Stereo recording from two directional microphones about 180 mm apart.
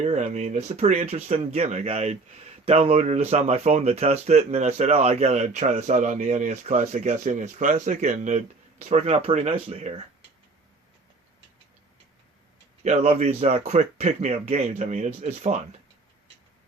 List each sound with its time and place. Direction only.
0.0 s speech: 40° right (ahead or behind)
12.8 s speech: 40° right (ahead or behind)